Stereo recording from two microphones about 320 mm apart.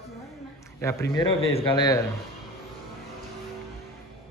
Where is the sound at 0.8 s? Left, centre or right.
Centre.